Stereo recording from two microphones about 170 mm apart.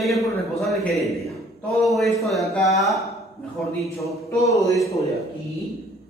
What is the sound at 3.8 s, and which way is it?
Speech, 20° left (ahead or behind).